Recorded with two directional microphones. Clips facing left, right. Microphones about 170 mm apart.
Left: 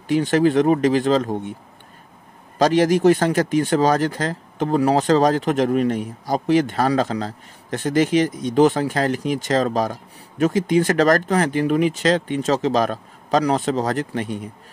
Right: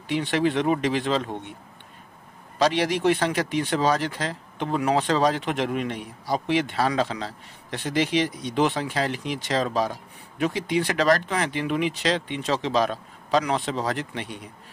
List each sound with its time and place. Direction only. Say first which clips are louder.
0.1 s speech: left 7 dB; 45° left (ahead or behind)
2.6 s speech: left 6 dB; 45° left (ahead or behind)